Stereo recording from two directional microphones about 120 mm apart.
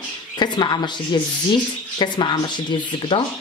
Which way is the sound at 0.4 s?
40° left (ahead or behind).